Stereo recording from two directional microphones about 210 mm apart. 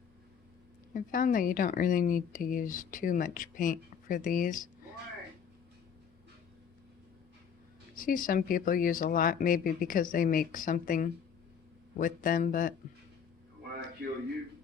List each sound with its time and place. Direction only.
0.9 s speech: 40° left (ahead or behind)
7.9 s speech: 40° left (ahead or behind)